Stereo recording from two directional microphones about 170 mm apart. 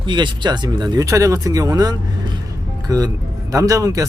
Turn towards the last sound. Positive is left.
turn(degrees=-20)  # may be behind; listen again after turning